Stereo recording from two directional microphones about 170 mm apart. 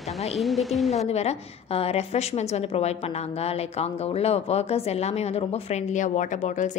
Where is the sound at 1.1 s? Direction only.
40° left (ahead or behind).